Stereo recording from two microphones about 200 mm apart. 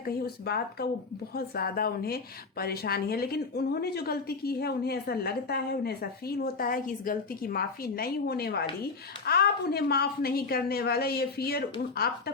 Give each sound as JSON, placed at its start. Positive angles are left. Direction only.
{"t": 0.0, "sound": "a woman's voice", "side_deg": 50}